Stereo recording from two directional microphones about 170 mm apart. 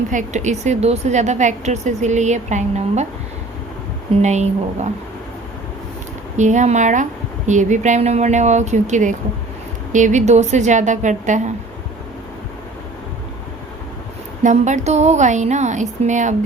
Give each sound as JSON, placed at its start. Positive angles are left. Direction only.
{"t": 0.1, "sound": "a woman's voice", "side_deg": -45}
{"t": 4.2, "sound": "speech", "side_deg": -40}
{"t": 6.3, "sound": "a woman's voice", "side_deg": -45}
{"t": 14.4, "sound": "a woman's voice", "side_deg": -45}